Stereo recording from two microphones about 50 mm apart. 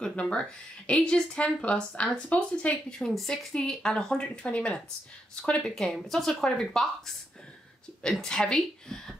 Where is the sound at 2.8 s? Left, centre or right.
Centre.